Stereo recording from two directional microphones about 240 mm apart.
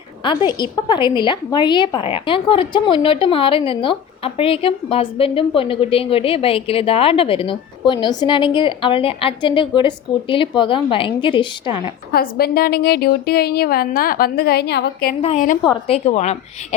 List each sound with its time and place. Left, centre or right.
0.3 s a woman's voice: centre
12.1 s a woman's voice: left
15.2 s a woman's voice: left